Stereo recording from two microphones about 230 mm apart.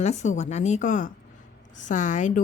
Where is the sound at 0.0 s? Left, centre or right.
Left.